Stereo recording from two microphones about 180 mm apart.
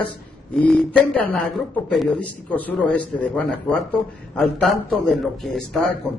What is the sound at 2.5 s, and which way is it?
A man's voice, 10° left (ahead or behind).